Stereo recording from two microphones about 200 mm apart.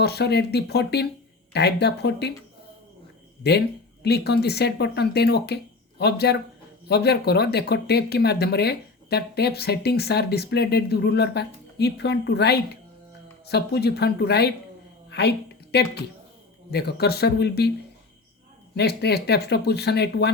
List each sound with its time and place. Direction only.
0.0 s speech: 55° left (ahead or behind)
3.4 s a woman's voice: 55° left (ahead or behind)
18.7 s speech: 55° left (ahead or behind)